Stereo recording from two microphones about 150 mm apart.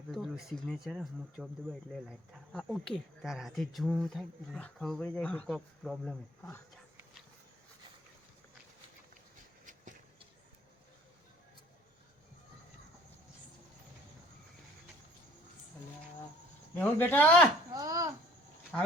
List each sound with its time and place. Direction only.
0.1 s speech: centre (ahead or behind)
5.5 s speech: centre (ahead or behind)
16.7 s speech: 10° left (ahead or behind)
17.7 s speech: 25° right (ahead or behind)